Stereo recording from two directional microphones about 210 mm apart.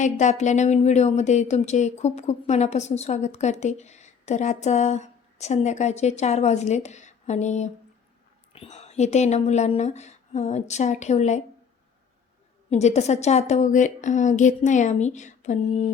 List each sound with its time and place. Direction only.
0.0 s speech: 35° left (ahead or behind)
12.7 s speech: 30° left (ahead or behind)